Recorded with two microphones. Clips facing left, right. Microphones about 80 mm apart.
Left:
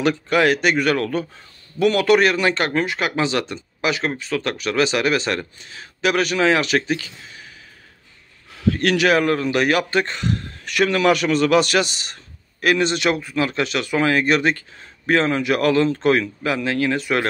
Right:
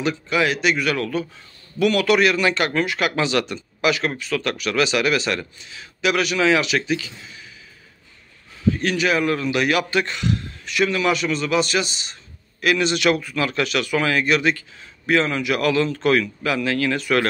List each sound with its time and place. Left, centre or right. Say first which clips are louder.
0.0 s a man's voice: left 4 dB; left
8.6 s a man's voice: left 3 dB; left
10.6 s a man's voice: left 3 dB; left
12.6 s speech: even; left